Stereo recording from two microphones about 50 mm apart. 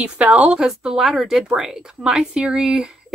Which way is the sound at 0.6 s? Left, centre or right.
Centre.